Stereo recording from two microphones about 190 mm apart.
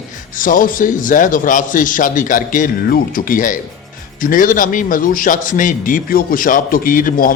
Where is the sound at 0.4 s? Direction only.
45° left (ahead or behind).